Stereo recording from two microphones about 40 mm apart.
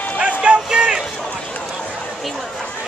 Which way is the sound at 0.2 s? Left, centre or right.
Right.